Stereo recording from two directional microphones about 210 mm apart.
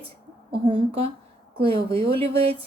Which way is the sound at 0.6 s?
25° right (ahead or behind).